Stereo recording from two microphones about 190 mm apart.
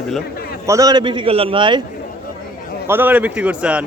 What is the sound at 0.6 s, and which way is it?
A man's voice, 15° right (ahead or behind).